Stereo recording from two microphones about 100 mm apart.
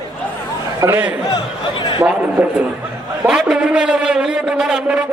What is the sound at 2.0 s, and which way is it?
Speech, 15° right (ahead or behind).